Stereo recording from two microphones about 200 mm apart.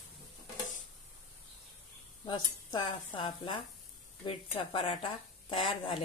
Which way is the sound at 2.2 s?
20° left (ahead or behind).